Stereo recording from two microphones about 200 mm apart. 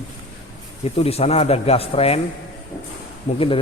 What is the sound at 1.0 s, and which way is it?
A man's voice, 30° left (ahead or behind).